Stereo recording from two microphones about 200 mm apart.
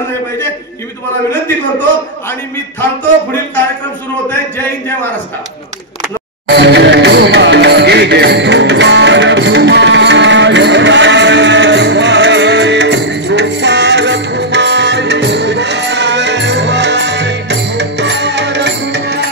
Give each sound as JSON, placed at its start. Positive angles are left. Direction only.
{"t": 6.5, "sound": "music", "side_deg": -60}